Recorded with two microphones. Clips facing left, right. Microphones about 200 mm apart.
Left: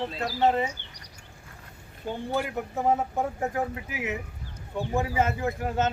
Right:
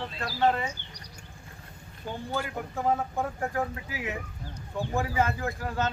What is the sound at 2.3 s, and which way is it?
Speech, 20° left (ahead or behind).